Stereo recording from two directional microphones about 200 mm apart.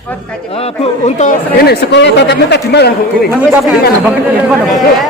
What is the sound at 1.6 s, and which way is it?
A man's voice, 55° left (ahead or behind).